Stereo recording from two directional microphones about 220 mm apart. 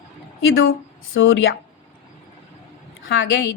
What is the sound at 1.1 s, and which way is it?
Speech, 60° left (ahead or behind).